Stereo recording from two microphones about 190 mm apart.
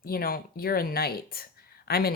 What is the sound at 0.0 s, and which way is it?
Speech, 50° left (ahead or behind).